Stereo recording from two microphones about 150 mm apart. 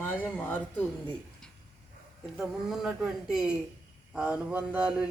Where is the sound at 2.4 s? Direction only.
5° right (ahead or behind).